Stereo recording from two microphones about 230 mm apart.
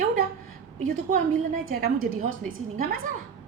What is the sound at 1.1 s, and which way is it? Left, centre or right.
A woman's voice, right.